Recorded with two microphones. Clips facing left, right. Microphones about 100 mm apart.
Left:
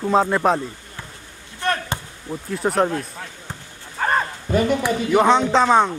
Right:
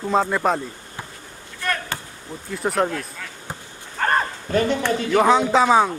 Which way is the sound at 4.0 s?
5° left (ahead or behind).